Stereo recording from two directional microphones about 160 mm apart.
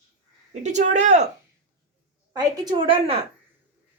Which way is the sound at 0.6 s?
50° right (ahead or behind).